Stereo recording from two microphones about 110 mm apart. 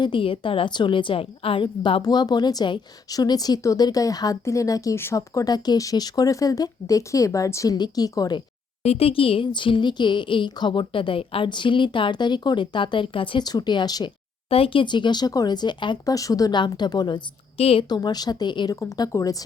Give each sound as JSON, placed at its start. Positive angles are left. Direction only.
{"t": 0.0, "sound": "speech", "side_deg": 50}
{"t": 8.8, "sound": "speech", "side_deg": 65}
{"t": 14.5, "sound": "speech", "side_deg": 55}
{"t": 16.1, "sound": "speech", "side_deg": 30}
{"t": 17.6, "sound": "a woman's voice", "side_deg": 65}
{"t": 17.8, "sound": "speech", "side_deg": 40}
{"t": 18.8, "sound": "speech", "side_deg": 30}